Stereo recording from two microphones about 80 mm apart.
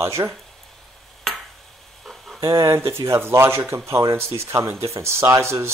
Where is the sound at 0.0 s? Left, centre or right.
Right.